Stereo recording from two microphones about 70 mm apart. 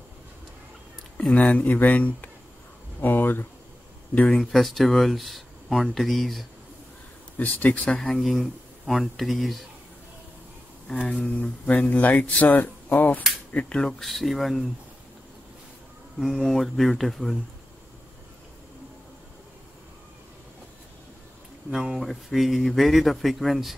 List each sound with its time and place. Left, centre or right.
1.3 s speech: centre
4.3 s speech: centre
7.3 s speech: left
8.1 s speech: centre
10.9 s speech: centre
16.2 s speech: centre
21.6 s speech: centre